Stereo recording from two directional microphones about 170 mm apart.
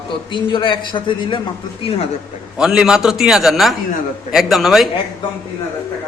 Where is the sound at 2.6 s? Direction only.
5° right (ahead or behind).